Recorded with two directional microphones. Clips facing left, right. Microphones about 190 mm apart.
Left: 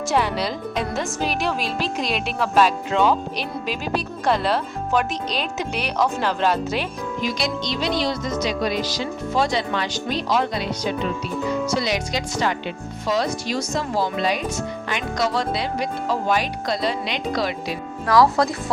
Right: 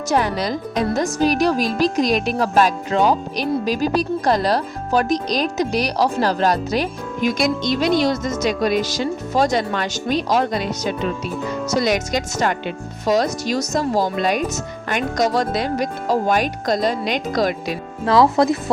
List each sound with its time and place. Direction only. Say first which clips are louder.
0.1 s speech: right 3 dB; 45° right (ahead or behind)
18.0 s speech: right 2 dB; 25° right (ahead or behind)